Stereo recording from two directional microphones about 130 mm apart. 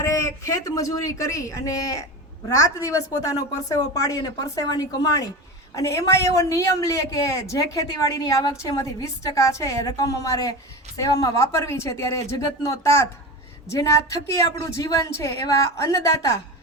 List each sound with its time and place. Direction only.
0.0 s speech: 25° left (ahead or behind)
8.7 s speech: 25° left (ahead or behind)